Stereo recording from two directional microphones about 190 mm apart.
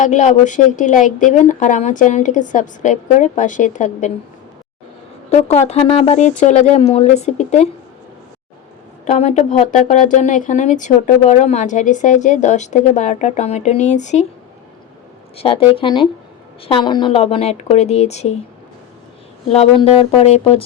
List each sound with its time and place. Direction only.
0.0 s speech: 40° left (ahead or behind)
5.3 s speech: 35° left (ahead or behind)
9.0 s speech: 35° left (ahead or behind)
15.4 s speech: 30° left (ahead or behind)
19.5 s speech: 30° left (ahead or behind)